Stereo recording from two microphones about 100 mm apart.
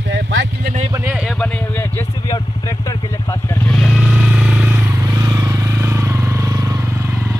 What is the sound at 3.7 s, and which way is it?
Motorcycle, 5° left (ahead or behind).